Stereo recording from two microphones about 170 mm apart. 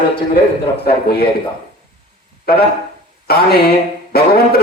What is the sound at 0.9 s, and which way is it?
Speech, 65° left (ahead or behind).